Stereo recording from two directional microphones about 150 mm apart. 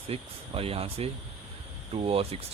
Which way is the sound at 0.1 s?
40° right (ahead or behind).